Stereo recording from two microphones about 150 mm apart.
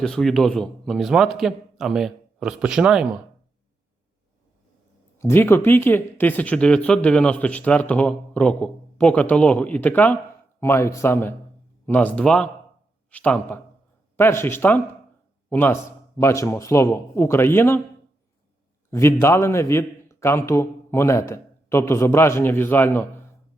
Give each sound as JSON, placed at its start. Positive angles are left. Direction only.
{"t": 0.0, "sound": "a man's voice", "side_deg": 0}
{"t": 5.1, "sound": "a man's voice", "side_deg": 15}
{"t": 18.9, "sound": "speech", "side_deg": 20}